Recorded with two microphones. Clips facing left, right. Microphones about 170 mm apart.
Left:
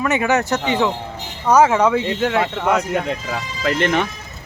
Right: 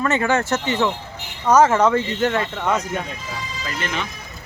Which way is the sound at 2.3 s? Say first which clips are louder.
Left 3 dB; 75° left (ahead or behind).